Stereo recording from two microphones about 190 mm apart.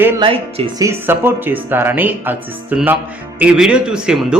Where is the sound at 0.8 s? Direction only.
10° right (ahead or behind).